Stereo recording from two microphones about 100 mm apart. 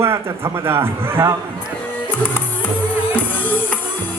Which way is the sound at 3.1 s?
15° left (ahead or behind).